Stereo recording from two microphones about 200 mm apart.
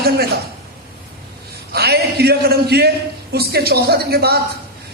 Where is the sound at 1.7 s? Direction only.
50° right (ahead or behind).